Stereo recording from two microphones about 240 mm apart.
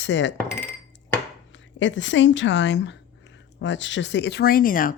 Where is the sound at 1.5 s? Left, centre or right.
Left.